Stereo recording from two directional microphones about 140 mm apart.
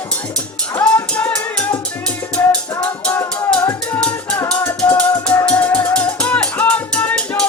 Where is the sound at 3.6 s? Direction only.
20° left (ahead or behind).